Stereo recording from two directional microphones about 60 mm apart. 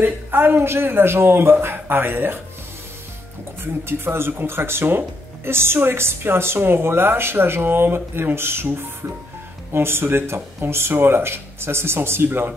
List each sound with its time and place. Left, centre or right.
0.0 s speech: right
3.6 s speech: right